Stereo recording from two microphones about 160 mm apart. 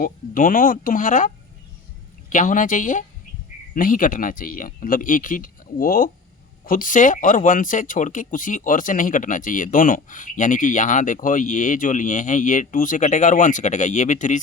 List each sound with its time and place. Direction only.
0.0 s speech: 60° left (ahead or behind)
2.3 s speech: 55° left (ahead or behind)